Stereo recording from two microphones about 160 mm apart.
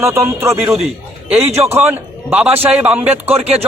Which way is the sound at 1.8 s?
10° right (ahead or behind).